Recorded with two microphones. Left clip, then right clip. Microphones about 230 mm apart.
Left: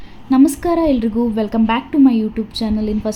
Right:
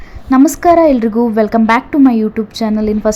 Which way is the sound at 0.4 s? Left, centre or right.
Centre.